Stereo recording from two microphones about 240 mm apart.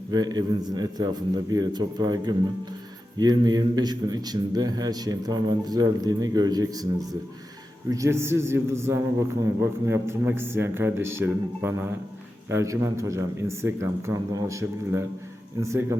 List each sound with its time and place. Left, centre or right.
0.1 s a man's voice: centre